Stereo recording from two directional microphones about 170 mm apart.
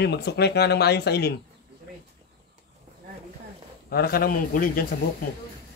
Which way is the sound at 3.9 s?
65° left (ahead or behind).